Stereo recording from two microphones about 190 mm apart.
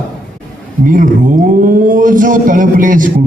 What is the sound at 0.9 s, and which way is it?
A man's voice, 45° right (ahead or behind).